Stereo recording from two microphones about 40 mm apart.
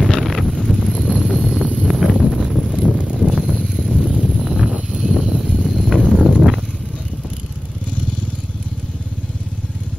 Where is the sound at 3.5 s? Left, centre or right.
Centre.